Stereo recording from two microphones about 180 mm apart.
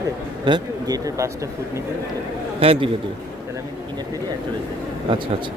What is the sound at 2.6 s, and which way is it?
Speech, 30° right (ahead or behind).